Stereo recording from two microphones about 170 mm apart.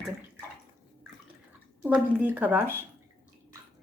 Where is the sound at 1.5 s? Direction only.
10° right (ahead or behind).